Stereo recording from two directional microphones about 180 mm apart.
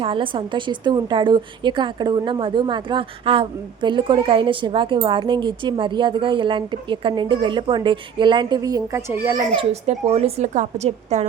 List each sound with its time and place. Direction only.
0.0 s a woman's voice: 30° right (ahead or behind); by 9.3 s 15° right (ahead or behind)
9.6 s a woman's voice: 35° right (ahead or behind)